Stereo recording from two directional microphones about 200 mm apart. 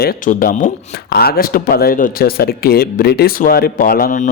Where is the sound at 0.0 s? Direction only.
45° left (ahead or behind).